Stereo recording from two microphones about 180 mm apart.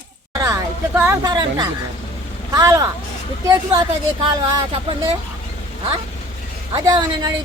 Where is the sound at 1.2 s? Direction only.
20° right (ahead or behind).